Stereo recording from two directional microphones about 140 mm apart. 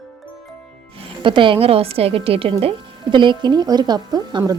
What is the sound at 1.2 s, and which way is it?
A woman's voice, 35° right (ahead or behind).